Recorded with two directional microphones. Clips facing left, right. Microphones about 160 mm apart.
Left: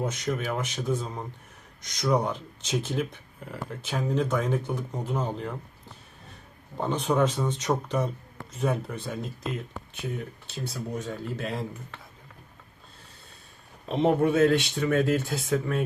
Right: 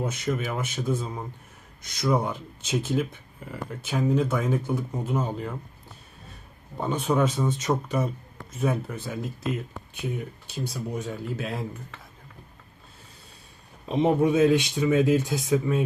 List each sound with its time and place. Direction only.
0.0 s speech: 10° right (ahead or behind)
6.7 s speech: 5° right (ahead or behind)
13.8 s speech: 15° right (ahead or behind)